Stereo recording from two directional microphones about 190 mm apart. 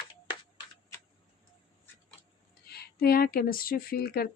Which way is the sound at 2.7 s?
55° left (ahead or behind).